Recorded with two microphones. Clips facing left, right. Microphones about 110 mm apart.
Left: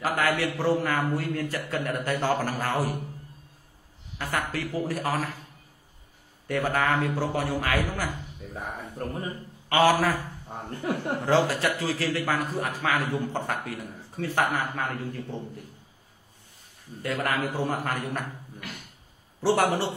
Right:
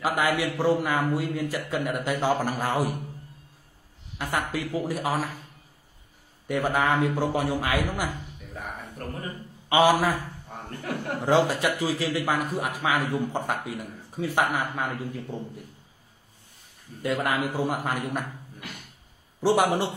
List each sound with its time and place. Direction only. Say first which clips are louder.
0.0 s a man's voice: right 1 dB; 15° right (ahead or behind)
4.2 s a man's voice: right 1 dB; 15° right (ahead or behind)
6.4 s a man's voice: right 1 dB; 15° right (ahead or behind)
9.7 s a man's voice: right 1 dB; 15° right (ahead or behind)
10.5 s speech: left 3 dB; 25° left (ahead or behind)
11.2 s a man's voice: right 2 dB; 15° right (ahead or behind)
17.0 s a man's voice: right 2 dB; 15° right (ahead or behind)
19.4 s a man's voice: right 1 dB; 15° right (ahead or behind)